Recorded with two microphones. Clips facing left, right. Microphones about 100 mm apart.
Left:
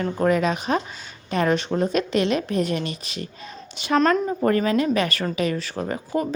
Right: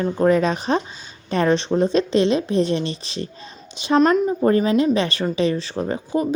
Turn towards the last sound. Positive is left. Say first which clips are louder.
# right 3 dB
turn(degrees=-20)  # may be behind; listen again after turning